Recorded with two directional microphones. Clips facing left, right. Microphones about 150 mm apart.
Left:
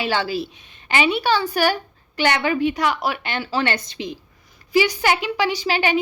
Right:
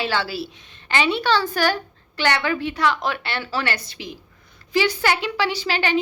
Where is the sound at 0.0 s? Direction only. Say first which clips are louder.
Left 2 dB; 15° left (ahead or behind).